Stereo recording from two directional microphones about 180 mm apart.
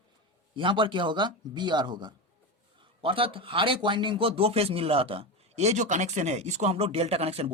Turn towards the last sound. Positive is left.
turn(degrees=-35)  # may be behind; listen again after turning